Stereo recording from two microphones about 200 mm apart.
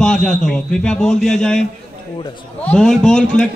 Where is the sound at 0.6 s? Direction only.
5° left (ahead or behind).